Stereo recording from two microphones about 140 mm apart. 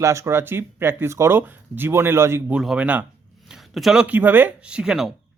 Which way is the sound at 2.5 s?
5° right (ahead or behind).